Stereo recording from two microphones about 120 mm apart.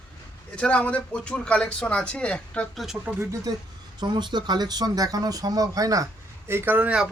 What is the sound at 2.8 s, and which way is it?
Speech, 10° right (ahead or behind).